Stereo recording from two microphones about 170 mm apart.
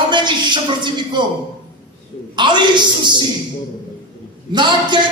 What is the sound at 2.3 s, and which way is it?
Speech, 25° right (ahead or behind).